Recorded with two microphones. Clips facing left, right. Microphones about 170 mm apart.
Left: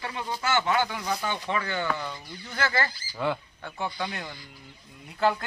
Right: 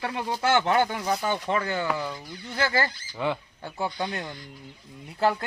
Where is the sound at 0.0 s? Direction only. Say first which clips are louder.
Right 4 dB; 60° right (ahead or behind); by 1.9 s 40° right (ahead or behind).